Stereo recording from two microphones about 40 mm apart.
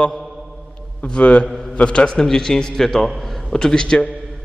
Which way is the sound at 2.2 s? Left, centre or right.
Centre.